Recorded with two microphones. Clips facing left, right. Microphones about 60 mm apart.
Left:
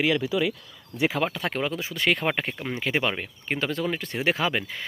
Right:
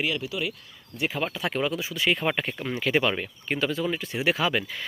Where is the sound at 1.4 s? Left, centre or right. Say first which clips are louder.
Right 1 dB; left.